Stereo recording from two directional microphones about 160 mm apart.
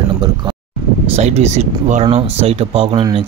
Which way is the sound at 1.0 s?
40° right (ahead or behind).